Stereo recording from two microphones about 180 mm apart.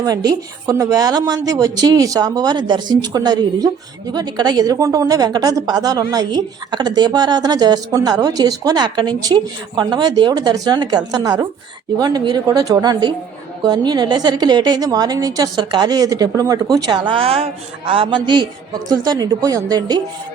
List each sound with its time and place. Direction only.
0.0 s a woman's voice: 20° right (ahead or behind)